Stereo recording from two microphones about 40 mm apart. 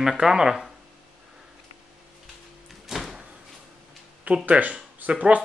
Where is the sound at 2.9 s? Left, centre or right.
Centre.